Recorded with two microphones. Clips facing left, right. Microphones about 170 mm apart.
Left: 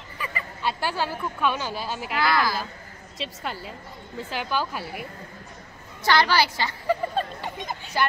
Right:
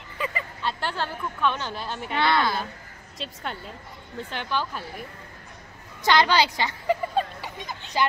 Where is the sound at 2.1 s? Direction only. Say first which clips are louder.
Right 1 dB; 25° right (ahead or behind).